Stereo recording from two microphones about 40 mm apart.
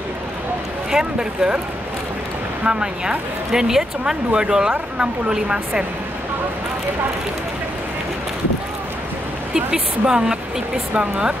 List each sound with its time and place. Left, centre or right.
0.9 s speech: centre
2.6 s speech: right
9.7 s speech: centre